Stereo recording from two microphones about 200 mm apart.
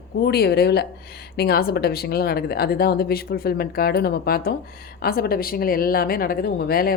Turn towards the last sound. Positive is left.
turn(degrees=50)  # may be behind; listen again after turning